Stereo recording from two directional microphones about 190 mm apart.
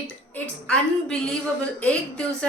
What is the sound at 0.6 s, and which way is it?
Speech, 5° left (ahead or behind).